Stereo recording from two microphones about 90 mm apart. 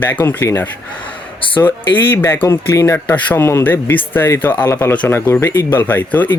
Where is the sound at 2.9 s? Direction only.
20° left (ahead or behind).